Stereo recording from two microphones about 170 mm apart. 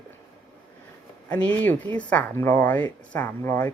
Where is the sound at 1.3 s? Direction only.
10° left (ahead or behind).